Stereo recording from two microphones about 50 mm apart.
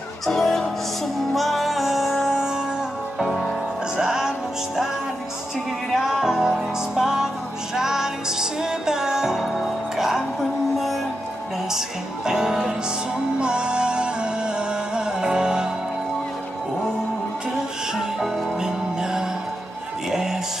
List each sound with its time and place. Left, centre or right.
0.3 s music: centre
5.9 s music: centre
12.3 s music: centre
17.9 s music: centre